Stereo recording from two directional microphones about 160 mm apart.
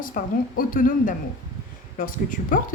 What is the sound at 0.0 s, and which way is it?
Speech, 60° left (ahead or behind).